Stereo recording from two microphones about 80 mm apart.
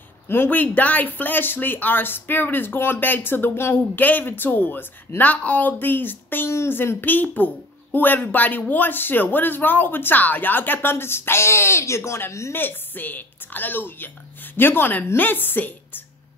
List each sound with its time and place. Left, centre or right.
0.3 s speech: left
12.5 s speech: left